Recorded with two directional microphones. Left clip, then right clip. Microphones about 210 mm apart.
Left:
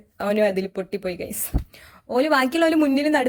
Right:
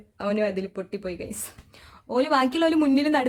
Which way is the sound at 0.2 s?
15° left (ahead or behind).